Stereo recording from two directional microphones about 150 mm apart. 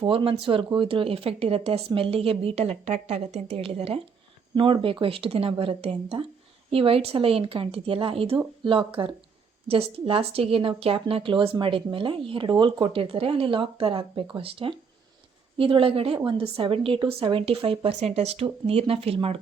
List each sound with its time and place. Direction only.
0.0 s a woman's voice: 35° right (ahead or behind)